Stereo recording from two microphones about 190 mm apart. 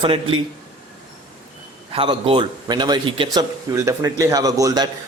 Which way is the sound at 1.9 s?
30° right (ahead or behind).